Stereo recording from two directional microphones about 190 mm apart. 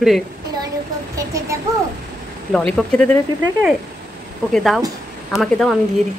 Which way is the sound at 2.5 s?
5° left (ahead or behind).